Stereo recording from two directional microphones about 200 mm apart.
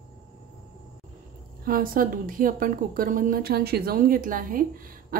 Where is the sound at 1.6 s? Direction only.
45° right (ahead or behind).